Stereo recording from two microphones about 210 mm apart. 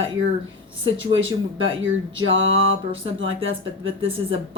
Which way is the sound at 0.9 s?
70° right (ahead or behind).